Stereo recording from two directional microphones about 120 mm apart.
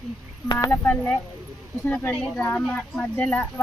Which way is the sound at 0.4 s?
30° left (ahead or behind).